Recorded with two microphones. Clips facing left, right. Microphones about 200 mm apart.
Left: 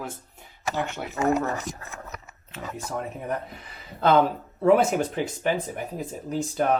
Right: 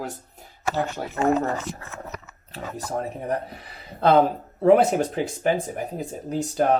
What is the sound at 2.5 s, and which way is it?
Speech, 35° right (ahead or behind).